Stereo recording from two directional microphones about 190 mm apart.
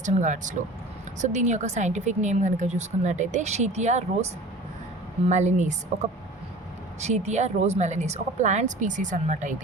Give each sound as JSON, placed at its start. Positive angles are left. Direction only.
{"t": 0.0, "sound": "a woman's voice", "side_deg": -40}